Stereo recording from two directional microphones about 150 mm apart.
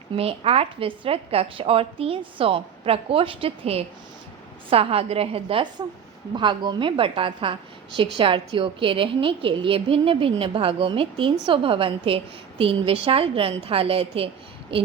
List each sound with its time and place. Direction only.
0.2 s a woman's voice: 40° right (ahead or behind)